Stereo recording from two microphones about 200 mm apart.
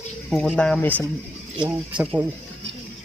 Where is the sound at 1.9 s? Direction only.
5° right (ahead or behind).